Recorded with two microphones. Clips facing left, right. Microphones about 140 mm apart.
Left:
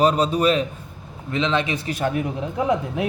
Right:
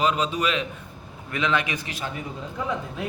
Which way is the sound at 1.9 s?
55° left (ahead or behind).